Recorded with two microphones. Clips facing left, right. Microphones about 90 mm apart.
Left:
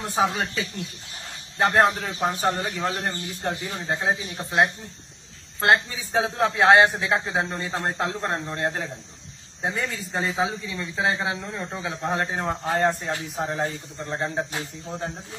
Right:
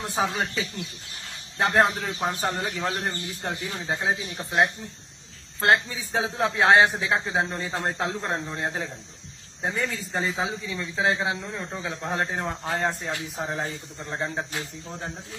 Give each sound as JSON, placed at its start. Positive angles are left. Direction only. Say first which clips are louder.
{"t": 0.0, "sound": "a man's voice", "louder": "left 3 dB", "side_deg": 0}